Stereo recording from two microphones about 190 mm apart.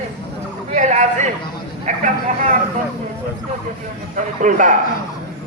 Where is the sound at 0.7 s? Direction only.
40° right (ahead or behind).